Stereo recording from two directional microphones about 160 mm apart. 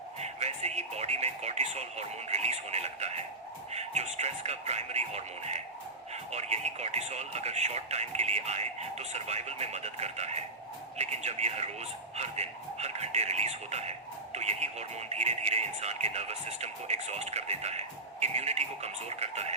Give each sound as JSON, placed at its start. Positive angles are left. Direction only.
{"t": 0.2, "sound": "speech", "side_deg": -45}